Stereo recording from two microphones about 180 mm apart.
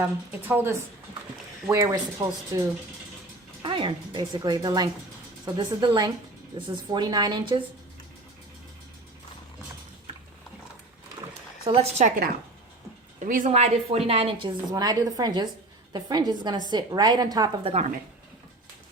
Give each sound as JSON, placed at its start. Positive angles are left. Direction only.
{"t": 0.0, "sound": "speech", "side_deg": -10}
{"t": 3.6, "sound": "a woman's voice", "side_deg": -25}
{"t": 11.6, "sound": "a woman's voice", "side_deg": -35}
{"t": 13.1, "sound": "a woman's voice", "side_deg": -45}